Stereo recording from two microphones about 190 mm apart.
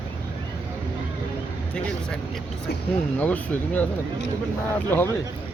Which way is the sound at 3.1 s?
10° left (ahead or behind).